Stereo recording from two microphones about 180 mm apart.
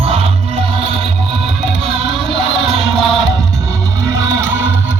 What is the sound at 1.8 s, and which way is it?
Music, 30° right (ahead or behind).